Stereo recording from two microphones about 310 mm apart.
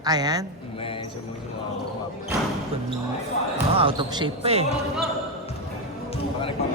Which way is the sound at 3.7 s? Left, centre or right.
Centre.